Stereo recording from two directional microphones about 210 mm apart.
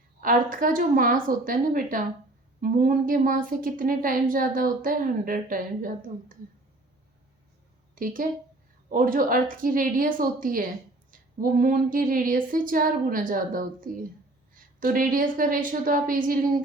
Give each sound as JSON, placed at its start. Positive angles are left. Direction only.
{"t": 0.2, "sound": "a woman's voice", "side_deg": -40}
{"t": 7.9, "sound": "a woman's voice", "side_deg": -40}